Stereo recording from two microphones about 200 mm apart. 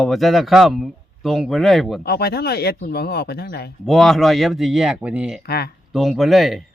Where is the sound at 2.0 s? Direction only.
55° left (ahead or behind).